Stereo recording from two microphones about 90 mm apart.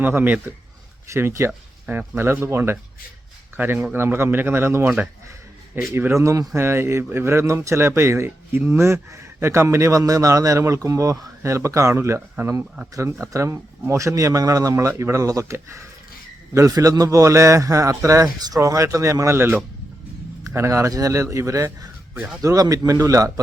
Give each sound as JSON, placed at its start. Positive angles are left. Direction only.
{"t": 0.0, "sound": "speech", "side_deg": -20}
{"t": 16.6, "sound": "speech", "side_deg": -40}